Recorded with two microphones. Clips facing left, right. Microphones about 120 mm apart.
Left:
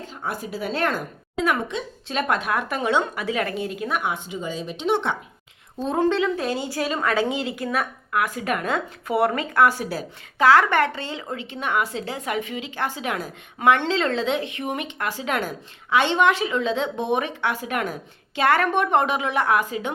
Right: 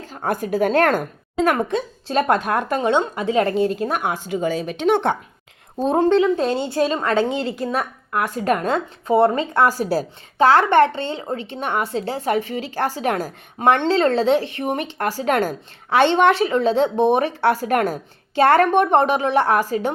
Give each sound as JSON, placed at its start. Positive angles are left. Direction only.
{"t": 0.0, "sound": "a woman's voice", "side_deg": -45}
{"t": 2.0, "sound": "a woman's voice", "side_deg": -35}
{"t": 5.8, "sound": "a woman's voice", "side_deg": -35}
{"t": 7.1, "sound": "a woman's voice", "side_deg": 10}
{"t": 7.6, "sound": "a woman's voice", "side_deg": -30}
{"t": 18.3, "sound": "a woman's voice", "side_deg": -30}